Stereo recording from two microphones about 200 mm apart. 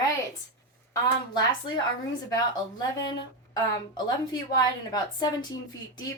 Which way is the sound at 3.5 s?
20° left (ahead or behind).